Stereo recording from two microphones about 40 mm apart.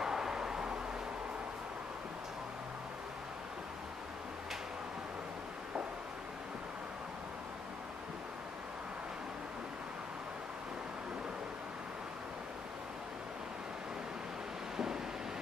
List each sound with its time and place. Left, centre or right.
0.0 s vehicle: centre